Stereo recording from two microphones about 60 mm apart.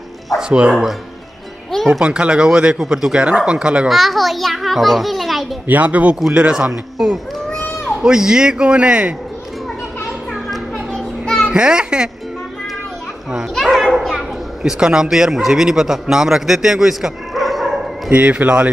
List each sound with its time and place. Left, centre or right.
0.4 s speech: centre
3.9 s a child's voice: centre
5.7 s a man's voice: right
6.3 s speech: centre
10.3 s children playing: centre
11.4 s a child's voice: centre
13.6 s speech: centre
18.1 s a man's voice: right